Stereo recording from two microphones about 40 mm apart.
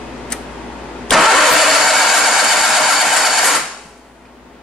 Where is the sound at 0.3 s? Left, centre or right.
Centre.